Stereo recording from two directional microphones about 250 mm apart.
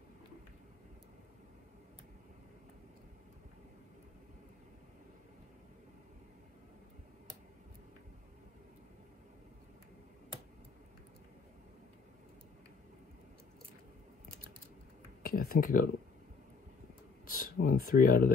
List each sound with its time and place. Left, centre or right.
15.2 s speech: left
17.3 s speech: left